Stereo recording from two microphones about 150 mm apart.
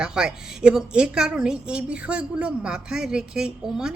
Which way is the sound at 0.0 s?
5° right (ahead or behind).